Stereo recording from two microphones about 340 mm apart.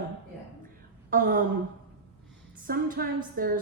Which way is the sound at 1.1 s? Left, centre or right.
Right.